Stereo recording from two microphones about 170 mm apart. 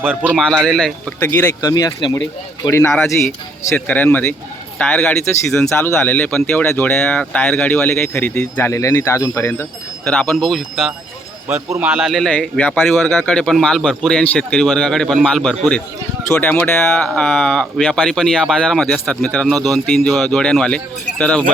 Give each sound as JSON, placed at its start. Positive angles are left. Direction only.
{"t": 0.0, "sound": "speech", "side_deg": -10}
{"t": 1.2, "sound": "speech", "side_deg": 10}
{"t": 1.7, "sound": "speech", "side_deg": 25}
{"t": 2.6, "sound": "speech", "side_deg": 15}
{"t": 2.9, "sound": "speech", "side_deg": 5}